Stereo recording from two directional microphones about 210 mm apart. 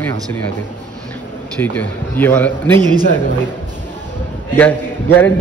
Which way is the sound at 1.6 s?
10° left (ahead or behind).